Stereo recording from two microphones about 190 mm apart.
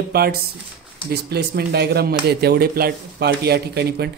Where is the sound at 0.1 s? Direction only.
55° right (ahead or behind).